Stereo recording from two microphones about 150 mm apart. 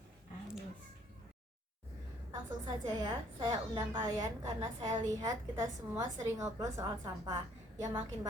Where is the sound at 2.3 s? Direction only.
30° right (ahead or behind).